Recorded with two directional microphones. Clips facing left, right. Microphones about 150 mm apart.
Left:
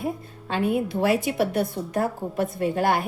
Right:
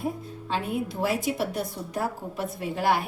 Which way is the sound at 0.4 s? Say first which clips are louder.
Left 5 dB; 60° left (ahead or behind).